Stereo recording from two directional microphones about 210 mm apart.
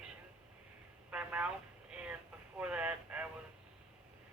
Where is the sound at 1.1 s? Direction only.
5° right (ahead or behind).